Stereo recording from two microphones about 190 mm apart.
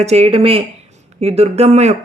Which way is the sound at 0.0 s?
35° right (ahead or behind).